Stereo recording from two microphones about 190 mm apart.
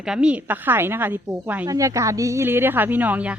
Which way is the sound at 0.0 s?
5° right (ahead or behind).